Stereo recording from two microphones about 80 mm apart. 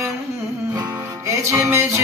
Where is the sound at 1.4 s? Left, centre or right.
Right.